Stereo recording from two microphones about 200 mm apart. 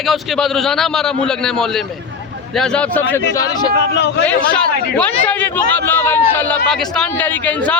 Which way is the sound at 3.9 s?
60° left (ahead or behind).